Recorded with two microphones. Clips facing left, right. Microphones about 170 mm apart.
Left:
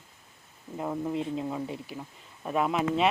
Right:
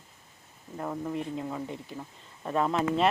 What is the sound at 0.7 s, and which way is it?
Speech, 10° left (ahead or behind).